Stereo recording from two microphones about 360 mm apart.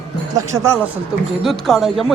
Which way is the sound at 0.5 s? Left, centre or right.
Centre.